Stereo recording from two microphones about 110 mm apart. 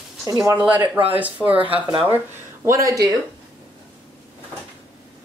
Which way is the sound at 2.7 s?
30° right (ahead or behind).